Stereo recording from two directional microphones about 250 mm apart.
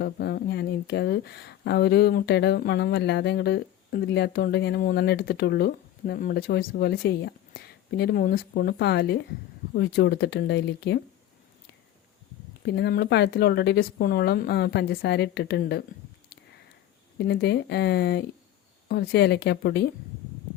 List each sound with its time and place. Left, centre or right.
0.0 s speech: left
12.6 s speech: left
17.2 s speech: left